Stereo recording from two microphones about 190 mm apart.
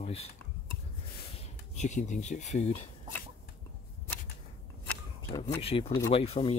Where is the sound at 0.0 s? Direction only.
35° left (ahead or behind).